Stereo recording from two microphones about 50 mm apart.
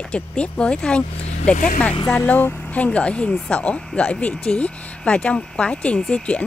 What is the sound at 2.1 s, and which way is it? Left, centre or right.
Speech, left.